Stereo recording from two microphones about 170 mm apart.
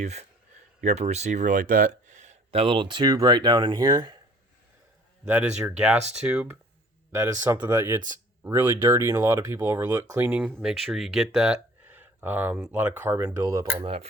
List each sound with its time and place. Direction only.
0.0 s speech: 40° right (ahead or behind); by 4.2 s 25° right (ahead or behind)
5.2 s speech: 5° right (ahead or behind)
13.8 s speech: 35° right (ahead or behind)